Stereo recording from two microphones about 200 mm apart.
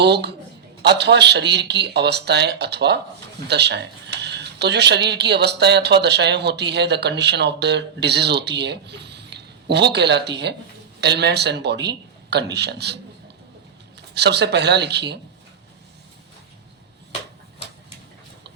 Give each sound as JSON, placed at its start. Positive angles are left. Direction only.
{"t": 0.0, "sound": "speech", "side_deg": -55}
{"t": 14.1, "sound": "speech", "side_deg": -55}